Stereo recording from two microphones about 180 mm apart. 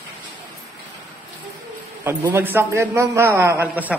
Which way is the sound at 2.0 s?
15° right (ahead or behind).